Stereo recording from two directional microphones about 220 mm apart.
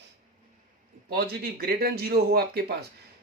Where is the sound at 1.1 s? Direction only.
45° right (ahead or behind).